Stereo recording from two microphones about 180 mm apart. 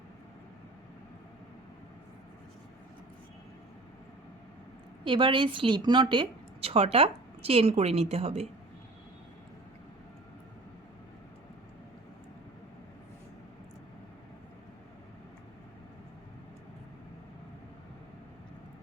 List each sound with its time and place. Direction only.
5.0 s a woman's voice: 25° right (ahead or behind)